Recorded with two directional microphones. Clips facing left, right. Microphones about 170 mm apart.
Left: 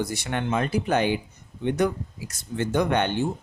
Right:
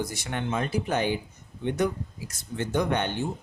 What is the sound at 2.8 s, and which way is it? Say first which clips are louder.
Speech: left 3 dB; 70° left (ahead or behind).